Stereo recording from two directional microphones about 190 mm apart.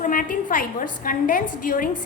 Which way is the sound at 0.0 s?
45° left (ahead or behind).